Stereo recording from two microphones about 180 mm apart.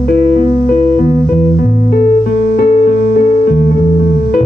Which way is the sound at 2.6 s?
50° left (ahead or behind).